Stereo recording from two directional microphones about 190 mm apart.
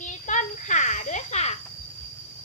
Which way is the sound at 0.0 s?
40° left (ahead or behind).